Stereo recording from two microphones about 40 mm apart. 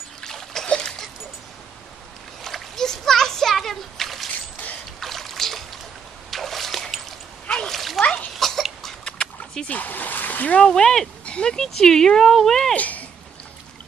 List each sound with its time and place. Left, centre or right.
0.2 s splash: centre
0.7 s a sound: centre
2.4 s splash: centre
5.0 s boat: centre
6.3 s trickle: centre
7.4 s splash: centre
8.4 s a sound: centre
9.0 s dog: centre
9.7 s splash: left
10.6 s speech: centre
11.5 s speech: centre
12.7 s speech: left